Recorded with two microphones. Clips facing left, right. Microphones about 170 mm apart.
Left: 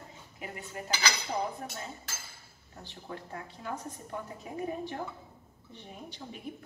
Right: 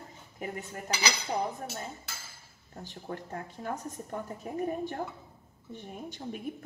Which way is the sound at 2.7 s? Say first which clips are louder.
Right 3 dB; 45° right (ahead or behind).